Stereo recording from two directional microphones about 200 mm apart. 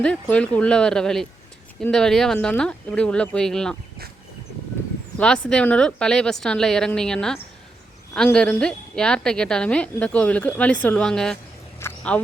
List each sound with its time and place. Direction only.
0.0 s a woman's voice: 5° left (ahead or behind)
5.1 s a woman's voice: 5° left (ahead or behind)
11.8 s a sound: 10° left (ahead or behind)